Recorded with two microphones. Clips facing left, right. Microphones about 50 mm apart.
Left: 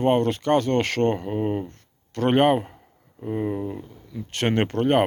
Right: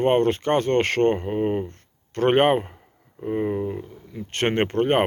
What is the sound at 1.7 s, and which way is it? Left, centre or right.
Speech, right.